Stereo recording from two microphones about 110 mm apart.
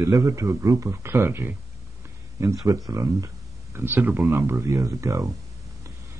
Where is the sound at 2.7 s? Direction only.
30° right (ahead or behind).